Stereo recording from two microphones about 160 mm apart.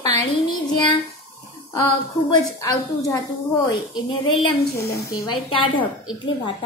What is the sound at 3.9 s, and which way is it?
A woman's voice, 30° left (ahead or behind).